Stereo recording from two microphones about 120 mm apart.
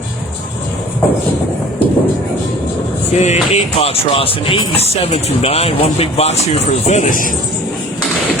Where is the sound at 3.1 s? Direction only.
65° left (ahead or behind); by 7.3 s 85° left.